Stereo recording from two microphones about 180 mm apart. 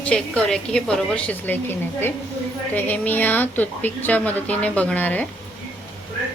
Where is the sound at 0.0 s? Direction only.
5° left (ahead or behind).